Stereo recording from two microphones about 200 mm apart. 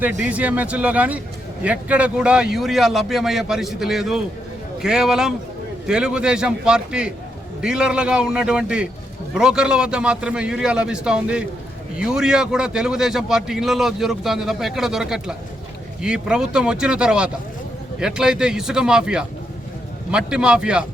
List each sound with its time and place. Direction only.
0.0 s a man's voice: 5° right (ahead or behind)